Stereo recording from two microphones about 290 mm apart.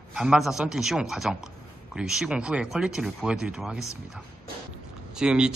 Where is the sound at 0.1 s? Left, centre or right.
Centre.